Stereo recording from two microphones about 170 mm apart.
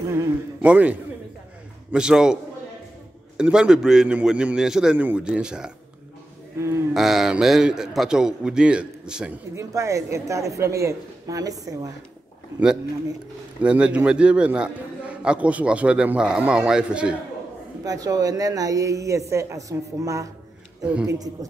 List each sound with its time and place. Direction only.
0.1 s a man's voice: 15° right (ahead or behind)
3.3 s a man's voice: 5° right (ahead or behind)
6.9 s a man's voice: centre (ahead or behind)
9.6 s a man's voice: 15° right (ahead or behind)
13.6 s a man's voice: 5° right (ahead or behind)
17.8 s speech: 20° right (ahead or behind)
20.8 s a man's voice: 5° right (ahead or behind)
21.1 s speech: 20° right (ahead or behind)